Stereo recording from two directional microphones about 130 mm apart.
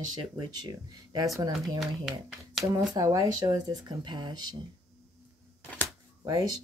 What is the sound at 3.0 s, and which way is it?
Speech, 25° right (ahead or behind).